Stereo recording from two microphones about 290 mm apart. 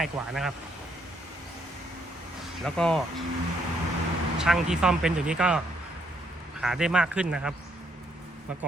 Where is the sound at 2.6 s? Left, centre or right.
Centre.